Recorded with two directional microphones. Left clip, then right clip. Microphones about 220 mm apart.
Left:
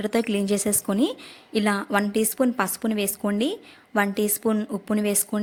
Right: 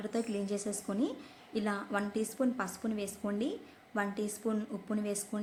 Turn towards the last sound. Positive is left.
turn(degrees=35)  # may be behind; listen again after turning